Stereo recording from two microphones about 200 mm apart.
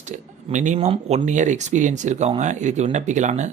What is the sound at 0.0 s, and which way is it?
Speech, 35° right (ahead or behind).